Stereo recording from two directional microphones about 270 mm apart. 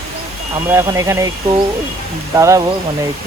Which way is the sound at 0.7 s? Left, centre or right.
Centre.